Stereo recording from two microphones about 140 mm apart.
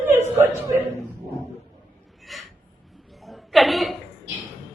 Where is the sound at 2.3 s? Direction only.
Centre (ahead or behind).